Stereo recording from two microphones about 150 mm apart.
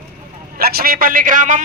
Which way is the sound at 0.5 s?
90° right.